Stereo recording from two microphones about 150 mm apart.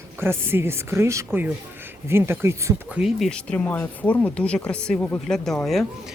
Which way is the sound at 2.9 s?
Centre (ahead or behind).